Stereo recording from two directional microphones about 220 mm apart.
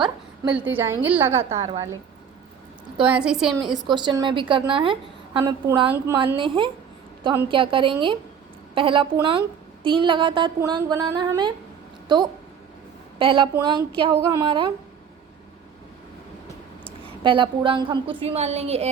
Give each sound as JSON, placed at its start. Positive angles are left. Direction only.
{"t": 0.5, "sound": "a woman's voice", "side_deg": -10}
{"t": 3.0, "sound": "a woman's voice", "side_deg": -5}
{"t": 3.7, "sound": "a woman's voice", "side_deg": -20}
{"t": 17.2, "sound": "a woman's voice", "side_deg": -20}